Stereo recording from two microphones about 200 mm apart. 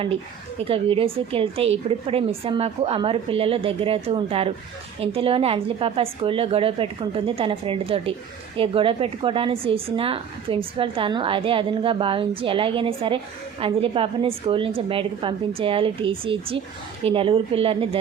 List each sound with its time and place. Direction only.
0.6 s a woman's voice: 25° right (ahead or behind)